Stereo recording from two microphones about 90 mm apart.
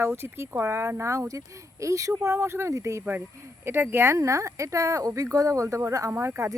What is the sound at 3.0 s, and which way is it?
Speech, 20° right (ahead or behind).